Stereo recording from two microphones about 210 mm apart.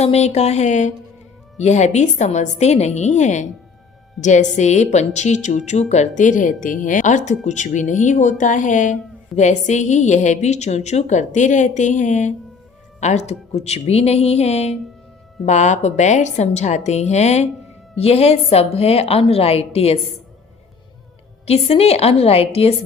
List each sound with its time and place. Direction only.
0.0 s a woman's voice: 30° left (ahead or behind)
21.4 s a woman's voice: 30° left (ahead or behind)